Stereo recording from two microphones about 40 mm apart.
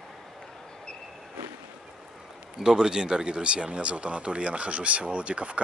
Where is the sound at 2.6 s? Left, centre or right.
Centre.